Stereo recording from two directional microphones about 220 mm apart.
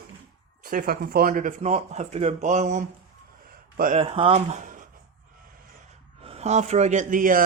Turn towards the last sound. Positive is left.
turn(degrees=-40)  # may be behind; listen again after turning